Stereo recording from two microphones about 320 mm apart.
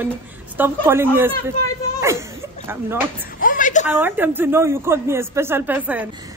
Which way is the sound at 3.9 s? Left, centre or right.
Centre.